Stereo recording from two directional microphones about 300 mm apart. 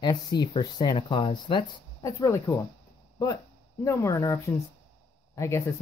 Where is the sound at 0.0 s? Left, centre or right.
Centre.